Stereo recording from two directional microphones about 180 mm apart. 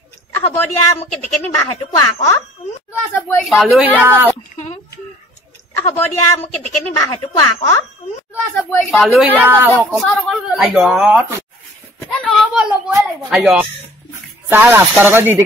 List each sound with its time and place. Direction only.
0.3 s a woman's voice: 10° left (ahead or behind)
3.4 s speech: centre (ahead or behind)
5.8 s a woman's voice: 15° left (ahead or behind)
8.5 s speech: 5° left (ahead or behind)
9.4 s speech: 10° right (ahead or behind)
12.0 s a sound: 5° left (ahead or behind)
12.5 s speech: 5° right (ahead or behind)